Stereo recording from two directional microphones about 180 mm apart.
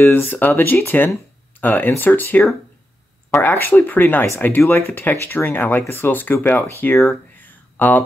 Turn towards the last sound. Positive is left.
turn(degrees=10)  # may be behind; listen again after turning